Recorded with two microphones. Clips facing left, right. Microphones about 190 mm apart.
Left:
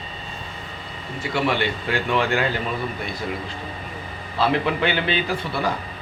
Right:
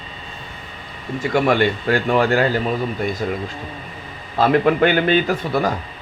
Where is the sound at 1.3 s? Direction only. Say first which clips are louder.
Right 6 dB; 50° right (ahead or behind).